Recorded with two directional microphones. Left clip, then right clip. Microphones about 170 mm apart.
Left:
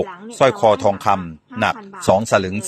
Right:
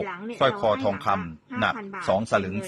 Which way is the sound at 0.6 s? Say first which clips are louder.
Left 9 dB; 35° left (ahead or behind).